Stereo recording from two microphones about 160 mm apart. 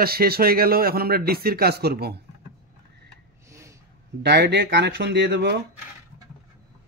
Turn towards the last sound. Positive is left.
turn(degrees=-90)